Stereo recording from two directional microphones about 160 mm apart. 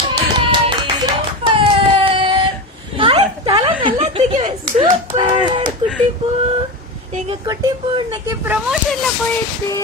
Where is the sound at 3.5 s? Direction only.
25° right (ahead or behind).